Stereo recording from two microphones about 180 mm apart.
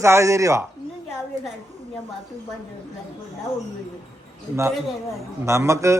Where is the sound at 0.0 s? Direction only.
15° right (ahead or behind).